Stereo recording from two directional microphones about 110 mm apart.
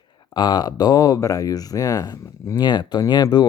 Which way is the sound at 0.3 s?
40° left (ahead or behind).